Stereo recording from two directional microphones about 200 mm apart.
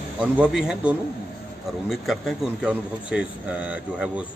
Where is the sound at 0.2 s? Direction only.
5° right (ahead or behind).